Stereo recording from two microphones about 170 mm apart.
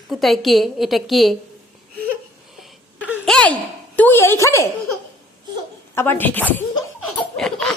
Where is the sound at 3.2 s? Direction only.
5° left (ahead or behind).